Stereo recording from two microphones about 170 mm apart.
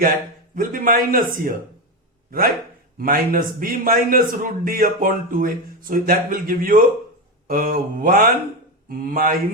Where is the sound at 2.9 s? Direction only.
55° right (ahead or behind).